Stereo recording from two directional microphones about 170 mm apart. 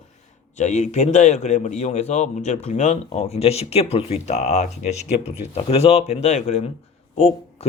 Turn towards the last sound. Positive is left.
turn(degrees=35)  # may be behind; listen again after turning